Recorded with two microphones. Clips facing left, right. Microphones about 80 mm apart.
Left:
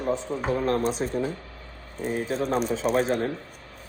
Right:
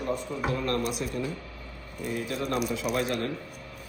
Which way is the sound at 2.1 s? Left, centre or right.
Left.